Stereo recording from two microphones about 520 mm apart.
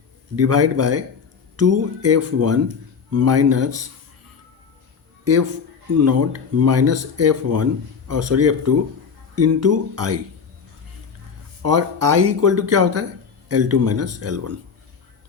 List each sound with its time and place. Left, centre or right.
0.3 s speech: right
6.0 s speech: right
11.6 s speech: right